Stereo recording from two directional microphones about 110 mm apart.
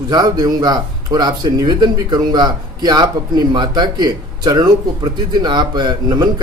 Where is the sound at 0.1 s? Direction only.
35° right (ahead or behind).